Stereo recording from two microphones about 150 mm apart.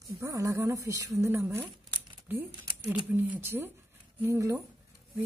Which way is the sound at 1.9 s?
30° right (ahead or behind).